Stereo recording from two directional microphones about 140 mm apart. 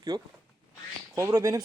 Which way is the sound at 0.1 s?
30° right (ahead or behind).